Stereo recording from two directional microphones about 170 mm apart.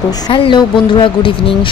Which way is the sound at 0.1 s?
25° left (ahead or behind).